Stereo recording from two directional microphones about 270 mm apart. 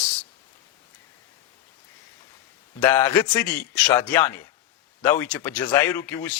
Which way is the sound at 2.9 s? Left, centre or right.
Centre.